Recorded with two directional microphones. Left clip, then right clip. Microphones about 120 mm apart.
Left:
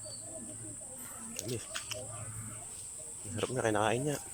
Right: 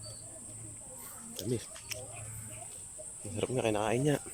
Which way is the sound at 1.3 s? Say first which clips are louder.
Right 2 dB; 30° right (ahead or behind).